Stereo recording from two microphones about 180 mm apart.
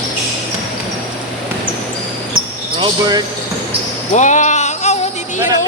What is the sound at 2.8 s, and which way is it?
Basketball bounce, 20° right (ahead or behind).